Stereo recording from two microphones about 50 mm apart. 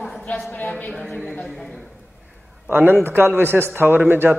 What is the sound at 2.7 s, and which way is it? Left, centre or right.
A man's voice, right.